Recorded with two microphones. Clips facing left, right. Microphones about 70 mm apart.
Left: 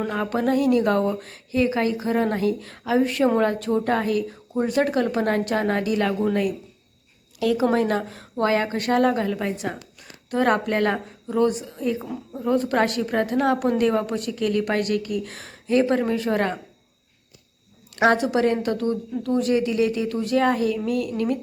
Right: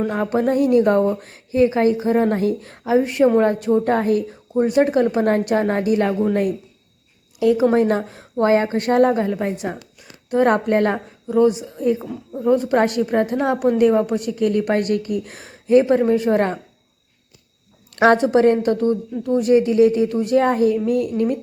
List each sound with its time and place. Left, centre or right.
0.1 s a woman's voice: right
4.5 s a woman's voice: centre
7.3 s a woman's voice: right
11.3 s a woman's voice: centre
12.0 s a woman's voice: centre
12.5 s a woman's voice: centre
17.9 s a woman's voice: right